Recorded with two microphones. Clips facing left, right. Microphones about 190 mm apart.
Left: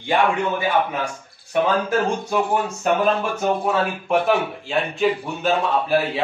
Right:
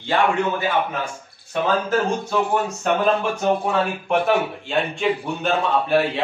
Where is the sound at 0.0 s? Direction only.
15° left (ahead or behind).